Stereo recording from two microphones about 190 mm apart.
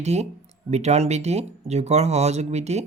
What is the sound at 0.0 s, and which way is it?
Speech, 35° right (ahead or behind).